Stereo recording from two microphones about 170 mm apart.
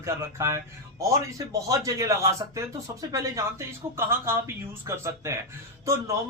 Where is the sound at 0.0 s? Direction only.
15° right (ahead or behind).